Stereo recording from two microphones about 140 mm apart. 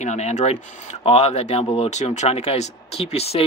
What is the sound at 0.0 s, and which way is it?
Speech, 55° left (ahead or behind).